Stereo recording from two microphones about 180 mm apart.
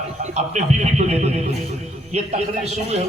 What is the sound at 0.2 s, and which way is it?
A man's voice, 40° right (ahead or behind).